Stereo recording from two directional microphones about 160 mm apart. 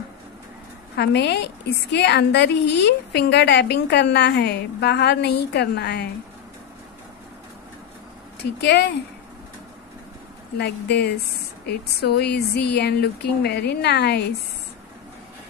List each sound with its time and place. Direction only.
0.9 s a woman's voice: 90° left
8.6 s a woman's voice: 90° left
10.6 s a woman's voice: 90° left